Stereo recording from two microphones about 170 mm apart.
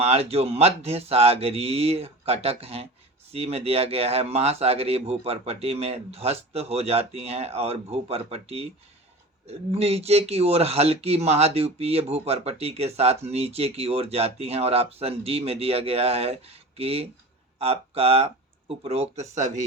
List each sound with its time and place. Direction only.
0.0 s speech: 35° right (ahead or behind)